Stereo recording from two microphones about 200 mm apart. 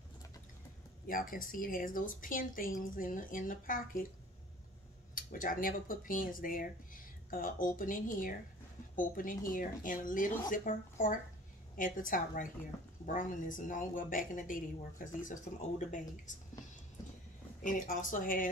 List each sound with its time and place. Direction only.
1.0 s speech: 45° left (ahead or behind)
5.1 s a woman's voice: 40° left (ahead or behind)
17.6 s speech: 40° left (ahead or behind)